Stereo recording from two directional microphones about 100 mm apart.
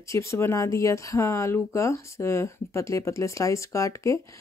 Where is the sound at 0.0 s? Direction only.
30° left (ahead or behind).